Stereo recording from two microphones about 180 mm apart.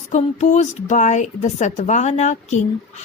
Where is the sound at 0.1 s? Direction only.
40° left (ahead or behind).